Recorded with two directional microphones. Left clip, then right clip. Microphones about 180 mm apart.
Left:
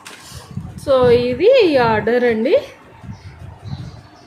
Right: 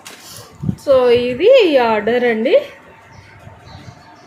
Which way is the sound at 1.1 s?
50° left (ahead or behind).